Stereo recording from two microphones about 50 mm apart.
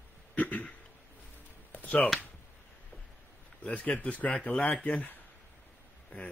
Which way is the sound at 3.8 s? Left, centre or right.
Left.